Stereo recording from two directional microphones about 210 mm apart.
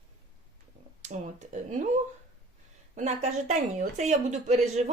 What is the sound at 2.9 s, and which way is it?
Speech, 35° right (ahead or behind).